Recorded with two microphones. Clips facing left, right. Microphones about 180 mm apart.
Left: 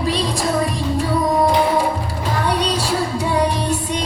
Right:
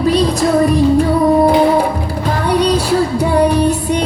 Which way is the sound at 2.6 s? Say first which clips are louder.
Right 7 dB; 55° right (ahead or behind).